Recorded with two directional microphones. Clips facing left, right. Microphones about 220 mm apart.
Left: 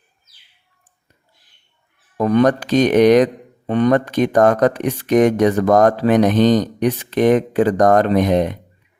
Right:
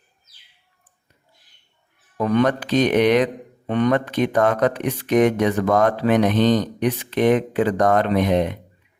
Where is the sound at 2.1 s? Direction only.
40° left (ahead or behind).